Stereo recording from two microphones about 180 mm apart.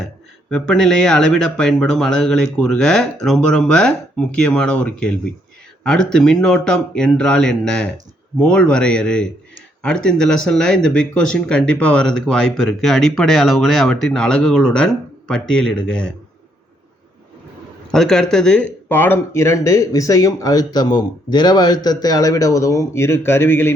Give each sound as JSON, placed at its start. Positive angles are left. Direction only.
{"t": 0.5, "sound": "speech", "side_deg": 5}
{"t": 17.9, "sound": "speech", "side_deg": 5}